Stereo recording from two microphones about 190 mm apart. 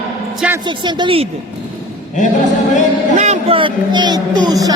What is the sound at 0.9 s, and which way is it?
Speech, 25° right (ahead or behind).